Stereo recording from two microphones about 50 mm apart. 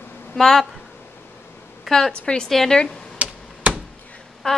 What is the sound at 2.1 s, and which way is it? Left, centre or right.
Speech, centre.